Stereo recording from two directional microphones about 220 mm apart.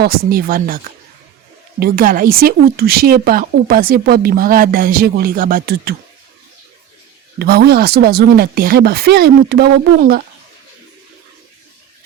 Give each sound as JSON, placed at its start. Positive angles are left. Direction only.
{"t": 0.0, "sound": "speech", "side_deg": -40}
{"t": 1.8, "sound": "speech", "side_deg": -40}
{"t": 7.3, "sound": "speech", "side_deg": -45}